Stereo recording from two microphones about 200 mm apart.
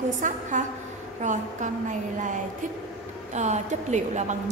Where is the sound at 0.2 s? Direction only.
40° right (ahead or behind).